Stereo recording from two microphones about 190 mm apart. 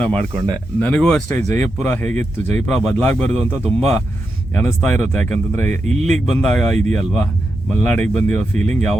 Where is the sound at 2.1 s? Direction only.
40° right (ahead or behind).